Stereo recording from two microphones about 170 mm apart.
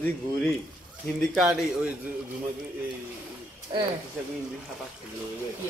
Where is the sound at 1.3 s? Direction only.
Centre (ahead or behind).